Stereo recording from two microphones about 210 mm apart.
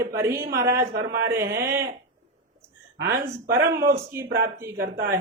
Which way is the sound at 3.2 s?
45° right (ahead or behind).